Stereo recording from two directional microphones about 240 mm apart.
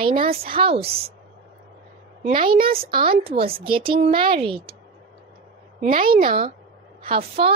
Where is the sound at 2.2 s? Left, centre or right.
Right.